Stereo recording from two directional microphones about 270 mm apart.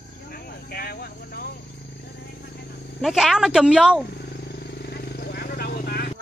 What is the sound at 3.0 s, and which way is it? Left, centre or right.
Speech, centre.